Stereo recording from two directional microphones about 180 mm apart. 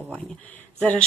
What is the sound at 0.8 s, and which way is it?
Speech, 5° left (ahead or behind).